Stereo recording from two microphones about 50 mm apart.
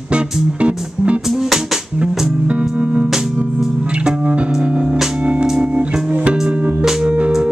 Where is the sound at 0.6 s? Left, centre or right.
Right.